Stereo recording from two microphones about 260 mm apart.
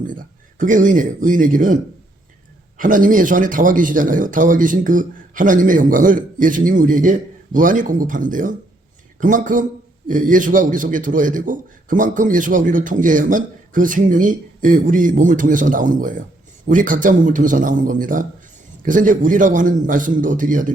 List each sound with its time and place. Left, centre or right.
0.1 s a man's voice: right